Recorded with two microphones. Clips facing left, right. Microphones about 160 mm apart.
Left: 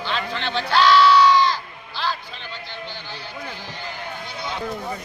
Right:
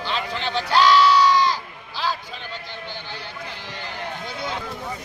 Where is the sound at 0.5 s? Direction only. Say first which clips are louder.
Even; 40° right (ahead or behind).